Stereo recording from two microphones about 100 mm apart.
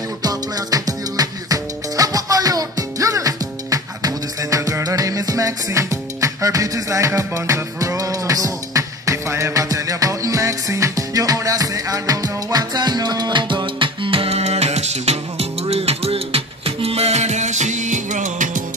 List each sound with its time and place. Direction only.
0.2 s music: 40° right (ahead or behind); by 17.2 s 90° right